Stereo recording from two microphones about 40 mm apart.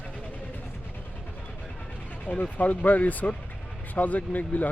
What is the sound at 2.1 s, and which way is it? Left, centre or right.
Speech, left.